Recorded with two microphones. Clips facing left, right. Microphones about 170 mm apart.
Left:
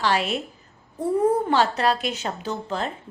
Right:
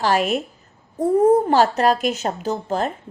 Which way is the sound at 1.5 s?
45° right (ahead or behind).